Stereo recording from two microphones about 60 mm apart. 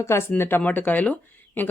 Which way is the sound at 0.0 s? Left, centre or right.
Left.